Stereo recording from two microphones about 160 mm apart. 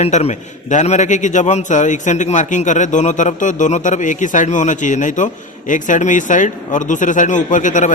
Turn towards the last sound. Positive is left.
turn(degrees=50)  # may be behind; listen again after turning